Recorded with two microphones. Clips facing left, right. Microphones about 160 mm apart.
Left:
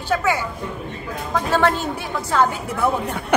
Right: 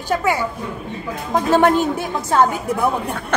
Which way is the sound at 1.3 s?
20° right (ahead or behind).